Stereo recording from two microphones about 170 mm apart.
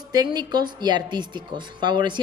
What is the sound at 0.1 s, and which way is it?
A woman's voice, 25° right (ahead or behind).